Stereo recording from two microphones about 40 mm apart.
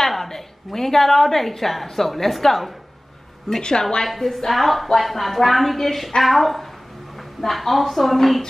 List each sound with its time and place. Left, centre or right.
0.0 s a woman's voice: centre
3.4 s a woman's voice: centre